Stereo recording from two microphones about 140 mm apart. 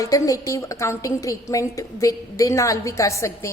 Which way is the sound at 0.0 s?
25° left (ahead or behind).